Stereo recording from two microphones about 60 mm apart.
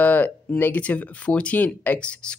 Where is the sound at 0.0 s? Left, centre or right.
Left.